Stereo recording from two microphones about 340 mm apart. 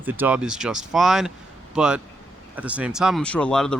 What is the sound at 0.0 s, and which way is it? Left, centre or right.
Speech, centre.